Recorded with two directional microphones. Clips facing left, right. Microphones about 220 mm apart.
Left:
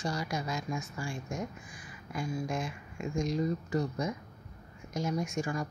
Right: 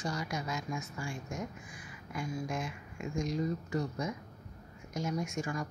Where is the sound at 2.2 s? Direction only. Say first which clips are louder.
Left 2 dB; 30° left (ahead or behind).